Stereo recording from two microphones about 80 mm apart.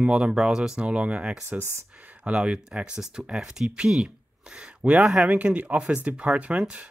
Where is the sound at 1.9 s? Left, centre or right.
Centre.